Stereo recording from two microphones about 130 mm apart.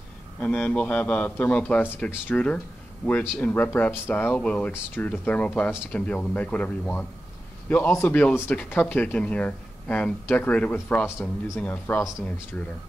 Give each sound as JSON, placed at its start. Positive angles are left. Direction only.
{"t": 0.4, "sound": "speech", "side_deg": 10}